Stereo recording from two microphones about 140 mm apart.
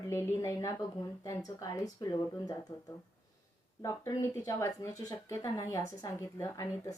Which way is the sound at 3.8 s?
25° left (ahead or behind).